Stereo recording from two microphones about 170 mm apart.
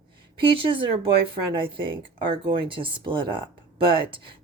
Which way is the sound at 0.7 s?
30° right (ahead or behind).